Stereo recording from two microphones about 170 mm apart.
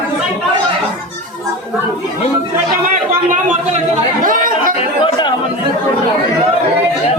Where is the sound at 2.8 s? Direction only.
50° right (ahead or behind).